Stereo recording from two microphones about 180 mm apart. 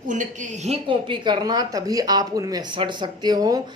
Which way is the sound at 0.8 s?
25° right (ahead or behind).